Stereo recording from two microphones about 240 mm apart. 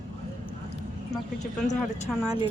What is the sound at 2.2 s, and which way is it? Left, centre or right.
Speech, centre.